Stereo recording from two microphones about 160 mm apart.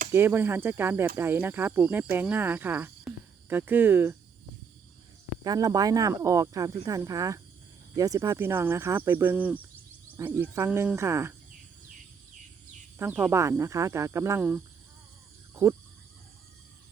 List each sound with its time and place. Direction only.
0.1 s speech: 15° right (ahead or behind)
5.4 s speech: 25° right (ahead or behind)
13.0 s speech: 10° right (ahead or behind)